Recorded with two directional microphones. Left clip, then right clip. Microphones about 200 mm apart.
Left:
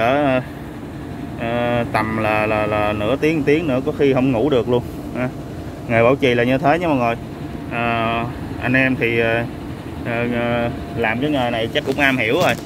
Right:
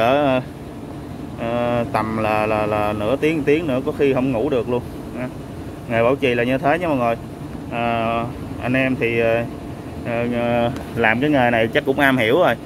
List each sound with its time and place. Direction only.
0.0 s vehicle: 10° right (ahead or behind)
1.4 s speech: 5° right (ahead or behind)
10.6 s speech: 20° right (ahead or behind)